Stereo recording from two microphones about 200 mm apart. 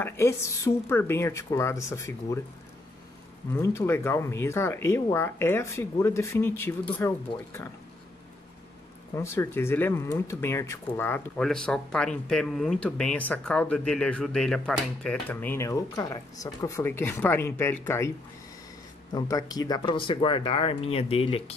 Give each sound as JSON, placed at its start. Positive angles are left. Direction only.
{"t": 0.0, "sound": "speech", "side_deg": 15}
{"t": 3.5, "sound": "speech", "side_deg": 10}
{"t": 9.1, "sound": "speech", "side_deg": 15}
{"t": 19.1, "sound": "speech", "side_deg": 15}